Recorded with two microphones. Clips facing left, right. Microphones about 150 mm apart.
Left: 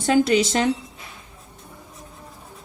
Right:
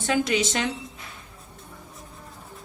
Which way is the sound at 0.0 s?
35° left (ahead or behind).